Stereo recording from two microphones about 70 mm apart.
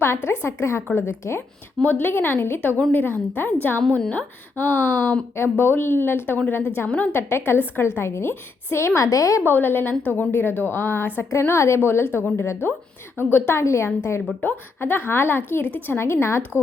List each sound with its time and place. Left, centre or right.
0.0 s a woman's voice: left
1.8 s a woman's voice: left
2.0 s a woman's voice: left
7.2 s a woman's voice: left
9.0 s a woman's voice: left
9.5 s a woman's voice: left
11.3 s a woman's voice: left
13.6 s a woman's voice: left
14.4 s a woman's voice: left